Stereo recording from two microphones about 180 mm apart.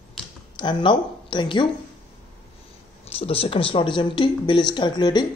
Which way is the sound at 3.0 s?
35° left (ahead or behind).